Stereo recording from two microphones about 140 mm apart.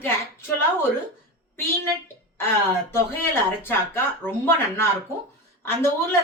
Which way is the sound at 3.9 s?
15° left (ahead or behind).